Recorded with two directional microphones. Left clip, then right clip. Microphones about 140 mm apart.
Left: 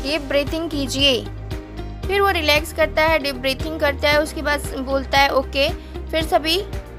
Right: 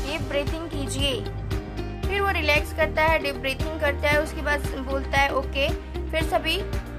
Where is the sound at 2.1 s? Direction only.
35° left (ahead or behind).